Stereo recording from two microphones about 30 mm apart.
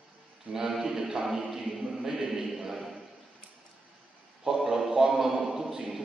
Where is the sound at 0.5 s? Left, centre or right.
Right.